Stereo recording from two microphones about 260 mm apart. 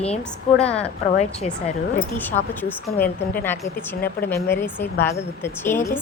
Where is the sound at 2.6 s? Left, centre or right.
Centre.